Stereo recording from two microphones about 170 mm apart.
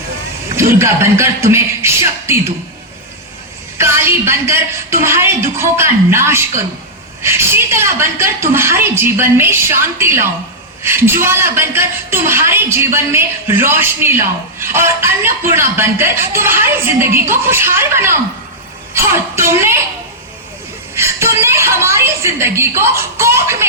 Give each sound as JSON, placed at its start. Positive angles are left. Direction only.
{"t": 0.4, "sound": "a woman's voice", "side_deg": -15}
{"t": 3.8, "sound": "a woman's voice", "side_deg": -15}
{"t": 20.9, "sound": "a woman's voice", "side_deg": -15}